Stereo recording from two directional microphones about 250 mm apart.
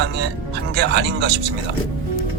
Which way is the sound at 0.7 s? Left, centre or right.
Right.